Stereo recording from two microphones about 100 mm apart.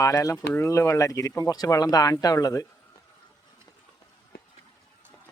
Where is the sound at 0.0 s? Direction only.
35° left (ahead or behind).